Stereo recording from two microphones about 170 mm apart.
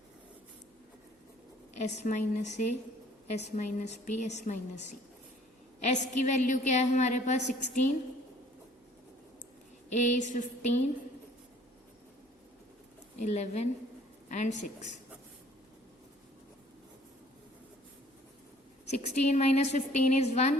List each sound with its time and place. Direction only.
1.8 s a woman's voice: 45° left (ahead or behind)
9.9 s a woman's voice: 45° left (ahead or behind)
13.2 s a woman's voice: 40° left (ahead or behind)
18.9 s a woman's voice: 40° left (ahead or behind)